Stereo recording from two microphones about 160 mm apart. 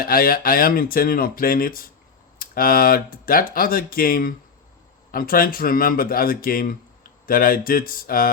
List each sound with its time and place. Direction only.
0.0 s speech: 65° left (ahead or behind)